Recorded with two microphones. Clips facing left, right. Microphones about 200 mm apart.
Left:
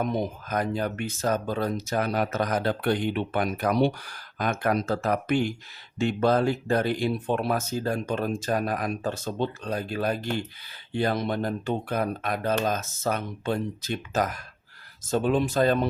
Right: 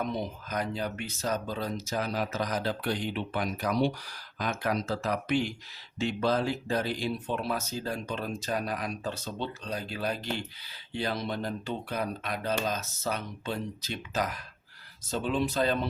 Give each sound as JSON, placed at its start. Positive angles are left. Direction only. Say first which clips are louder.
{"t": 0.0, "sound": "speech", "louder": "left 5 dB", "side_deg": 50}